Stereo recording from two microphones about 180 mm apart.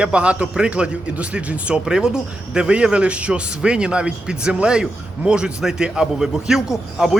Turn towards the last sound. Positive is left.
turn(degrees=-5)  # may be behind; listen again after turning